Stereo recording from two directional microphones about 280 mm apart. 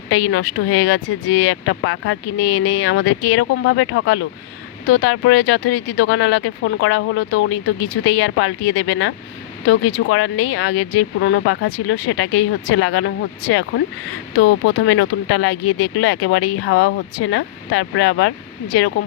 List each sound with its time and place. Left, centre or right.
0.1 s speech: left